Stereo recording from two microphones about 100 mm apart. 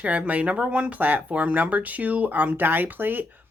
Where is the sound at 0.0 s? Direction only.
15° right (ahead or behind).